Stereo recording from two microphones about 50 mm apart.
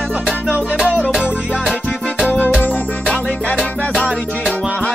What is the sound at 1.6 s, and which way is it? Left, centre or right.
Music, centre.